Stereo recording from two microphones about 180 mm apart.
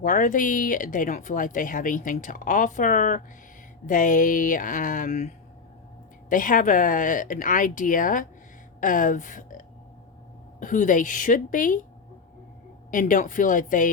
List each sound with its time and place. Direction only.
0.0 s speech: 50° left (ahead or behind)
6.3 s a woman's voice: 50° left (ahead or behind)
12.9 s speech: 50° left (ahead or behind)